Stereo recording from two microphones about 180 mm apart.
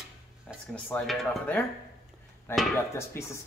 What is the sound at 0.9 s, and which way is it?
Speech, 5° left (ahead or behind).